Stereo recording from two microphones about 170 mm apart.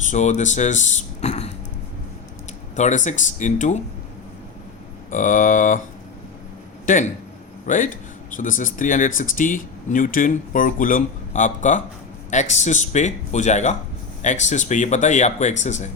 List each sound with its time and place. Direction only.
0.0 s speech: 45° left (ahead or behind)
2.7 s speech: 45° left (ahead or behind)
5.1 s speech: 50° left (ahead or behind)
6.8 s speech: 50° left (ahead or behind)